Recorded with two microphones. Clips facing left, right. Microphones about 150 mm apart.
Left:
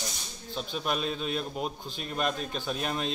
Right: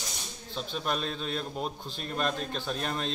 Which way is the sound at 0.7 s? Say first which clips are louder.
Left 1 dB; 10° left (ahead or behind).